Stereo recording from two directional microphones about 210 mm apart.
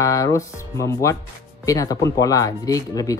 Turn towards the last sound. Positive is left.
turn(degrees=15)  # may be behind; listen again after turning